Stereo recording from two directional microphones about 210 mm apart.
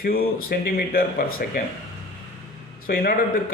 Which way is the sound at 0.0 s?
45° left (ahead or behind).